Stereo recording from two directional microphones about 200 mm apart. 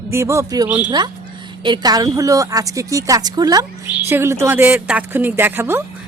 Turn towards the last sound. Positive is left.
turn(degrees=-10)  # may be behind; listen again after turning